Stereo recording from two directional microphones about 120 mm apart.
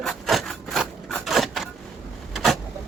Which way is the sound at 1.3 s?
Centre (ahead or behind).